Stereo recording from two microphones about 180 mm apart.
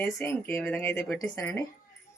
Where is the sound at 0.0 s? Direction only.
15° left (ahead or behind).